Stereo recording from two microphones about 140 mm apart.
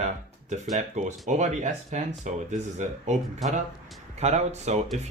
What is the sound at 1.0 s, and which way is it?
Speech, 60° right (ahead or behind).